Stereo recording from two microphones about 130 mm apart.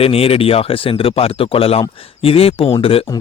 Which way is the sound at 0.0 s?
50° left (ahead or behind).